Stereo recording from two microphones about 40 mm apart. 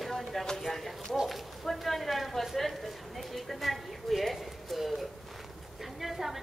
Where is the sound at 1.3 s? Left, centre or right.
Centre.